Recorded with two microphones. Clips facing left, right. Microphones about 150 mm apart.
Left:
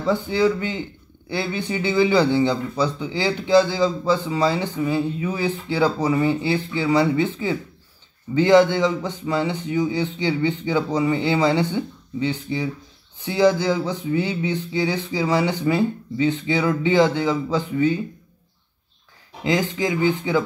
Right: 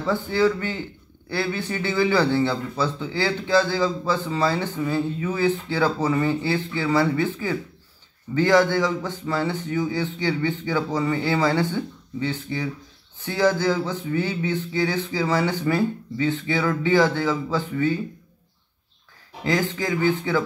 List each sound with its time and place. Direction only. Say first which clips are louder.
0.0 s speech: left 1 dB; 15° left (ahead or behind)
19.4 s speech: left 2 dB; 15° left (ahead or behind)